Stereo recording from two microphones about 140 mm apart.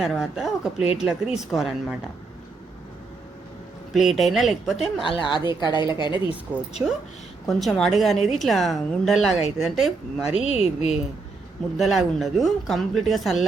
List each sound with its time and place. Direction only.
0.0 s a woman's voice: 5° right (ahead or behind)
3.9 s a woman's voice: centre (ahead or behind)
5.0 s a woman's voice: 35° left (ahead or behind)
6.8 s a woman's voice: 10° right (ahead or behind)
10.3 s speech: 45° left (ahead or behind)
11.8 s a woman's voice: centre (ahead or behind)